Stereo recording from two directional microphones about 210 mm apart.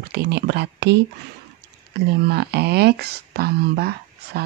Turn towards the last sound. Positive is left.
turn(degrees=-50)  # may be behind; listen again after turning